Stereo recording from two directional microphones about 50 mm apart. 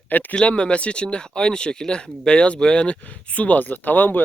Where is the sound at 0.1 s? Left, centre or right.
Left.